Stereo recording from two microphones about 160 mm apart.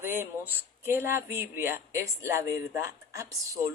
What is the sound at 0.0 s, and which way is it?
Speech, 15° right (ahead or behind).